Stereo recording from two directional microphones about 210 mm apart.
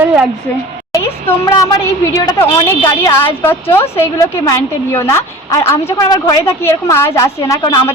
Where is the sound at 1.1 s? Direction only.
30° left (ahead or behind).